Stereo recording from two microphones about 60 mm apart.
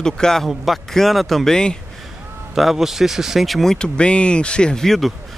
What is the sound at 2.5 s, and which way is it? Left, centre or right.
Speech, centre.